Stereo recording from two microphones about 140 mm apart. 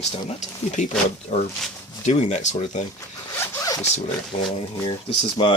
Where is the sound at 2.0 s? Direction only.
55° left (ahead or behind).